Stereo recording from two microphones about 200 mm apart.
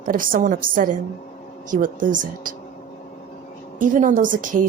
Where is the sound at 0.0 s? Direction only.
45° right (ahead or behind).